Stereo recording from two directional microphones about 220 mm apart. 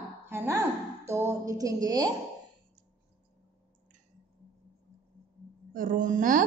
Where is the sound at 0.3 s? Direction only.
10° right (ahead or behind).